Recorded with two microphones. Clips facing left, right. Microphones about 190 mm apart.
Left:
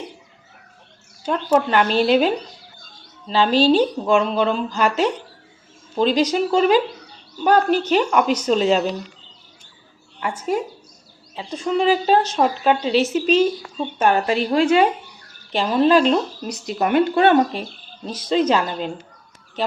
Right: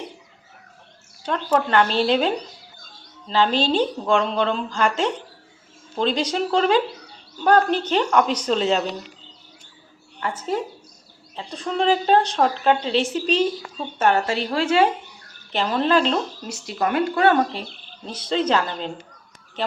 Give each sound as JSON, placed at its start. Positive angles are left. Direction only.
{"t": 1.2, "sound": "a woman's voice", "side_deg": 10}
{"t": 10.2, "sound": "a woman's voice", "side_deg": 10}
{"t": 11.6, "sound": "a woman's voice", "side_deg": 5}